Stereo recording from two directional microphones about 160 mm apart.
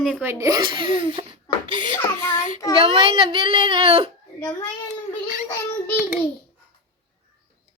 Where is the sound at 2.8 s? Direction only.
30° right (ahead or behind).